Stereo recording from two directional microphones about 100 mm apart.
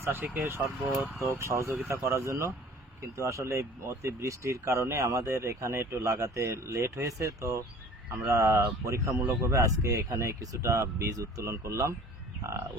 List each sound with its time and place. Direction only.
0.0 s speech: 20° right (ahead or behind)